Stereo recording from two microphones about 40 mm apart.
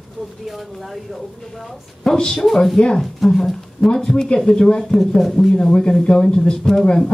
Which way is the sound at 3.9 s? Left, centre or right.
Centre.